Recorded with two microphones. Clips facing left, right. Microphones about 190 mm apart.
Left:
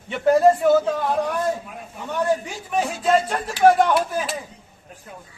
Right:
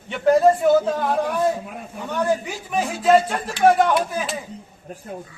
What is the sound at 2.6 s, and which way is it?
Speech, centre (ahead or behind).